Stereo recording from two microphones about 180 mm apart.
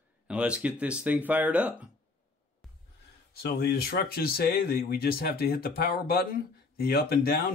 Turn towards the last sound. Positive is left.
turn(degrees=55)  # may be behind; listen again after turning